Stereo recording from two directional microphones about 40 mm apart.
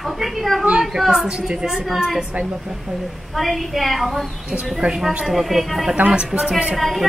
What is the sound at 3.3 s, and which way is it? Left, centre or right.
Speech, centre.